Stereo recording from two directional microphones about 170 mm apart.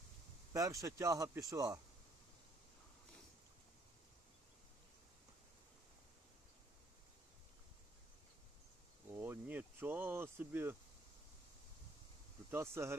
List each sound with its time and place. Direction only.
0.5 s speech: 20° right (ahead or behind)
9.1 s speech: 15° right (ahead or behind)
12.5 s speech: 15° right (ahead or behind)